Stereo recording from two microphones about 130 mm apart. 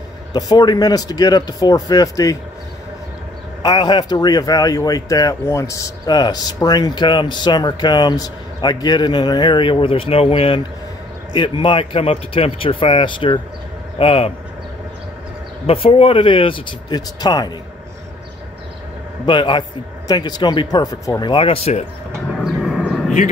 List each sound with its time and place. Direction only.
0.3 s speech: 30° left (ahead or behind)
3.6 s speech: 30° left (ahead or behind); by 14.3 s 45° left (ahead or behind)
15.6 s speech: 50° left (ahead or behind); by 17.5 s 30° left (ahead or behind)
19.2 s speech: 40° left (ahead or behind)
21.3 s speech: 45° left (ahead or behind)
22.3 s vehicle: centre (ahead or behind)
22.8 s a sound: 5° left (ahead or behind)